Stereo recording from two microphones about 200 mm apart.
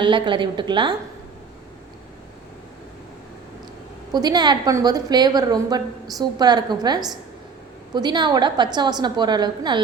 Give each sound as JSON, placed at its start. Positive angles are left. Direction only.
{"t": 0.0, "sound": "a woman's voice", "side_deg": -25}
{"t": 4.1, "sound": "a woman's voice", "side_deg": -20}